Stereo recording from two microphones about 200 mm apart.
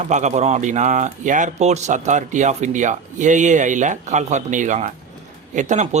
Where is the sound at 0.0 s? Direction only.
35° right (ahead or behind).